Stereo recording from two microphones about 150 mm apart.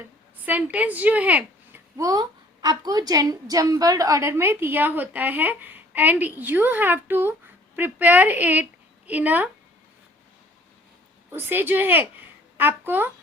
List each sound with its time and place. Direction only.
0.4 s a woman's voice: 10° right (ahead or behind)
2.0 s a woman's voice: 25° right (ahead or behind)
11.3 s a woman's voice: 15° right (ahead or behind)